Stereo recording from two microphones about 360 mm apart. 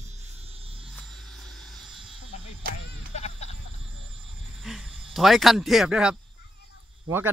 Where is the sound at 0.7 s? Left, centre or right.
Centre.